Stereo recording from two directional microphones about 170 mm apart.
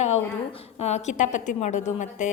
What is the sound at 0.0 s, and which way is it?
A woman's voice, 40° left (ahead or behind).